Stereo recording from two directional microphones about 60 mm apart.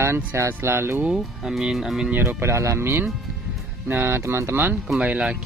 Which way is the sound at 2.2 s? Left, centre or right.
Right.